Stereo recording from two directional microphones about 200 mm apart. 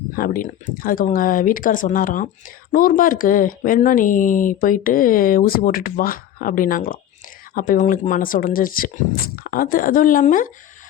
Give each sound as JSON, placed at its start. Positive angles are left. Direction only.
{"t": 0.2, "sound": "speech", "side_deg": 45}